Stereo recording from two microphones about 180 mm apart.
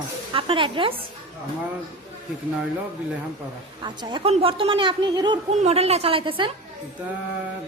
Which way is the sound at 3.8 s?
25° right (ahead or behind).